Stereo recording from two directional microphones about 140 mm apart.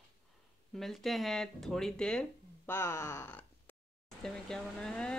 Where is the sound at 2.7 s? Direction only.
20° left (ahead or behind).